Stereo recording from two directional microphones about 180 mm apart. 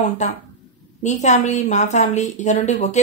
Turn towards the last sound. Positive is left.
turn(degrees=40)  # may be behind; listen again after turning